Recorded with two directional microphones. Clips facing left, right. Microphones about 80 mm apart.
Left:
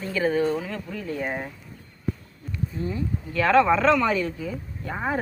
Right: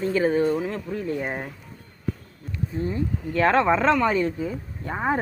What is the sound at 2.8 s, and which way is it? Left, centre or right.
Speech, right.